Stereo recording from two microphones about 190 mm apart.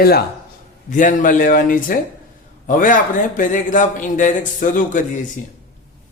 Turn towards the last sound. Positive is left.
turn(degrees=45)  # may be behind; listen again after turning